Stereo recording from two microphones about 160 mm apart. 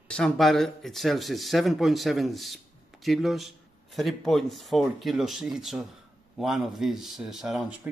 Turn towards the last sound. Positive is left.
turn(degrees=-5)  # may be behind; listen again after turning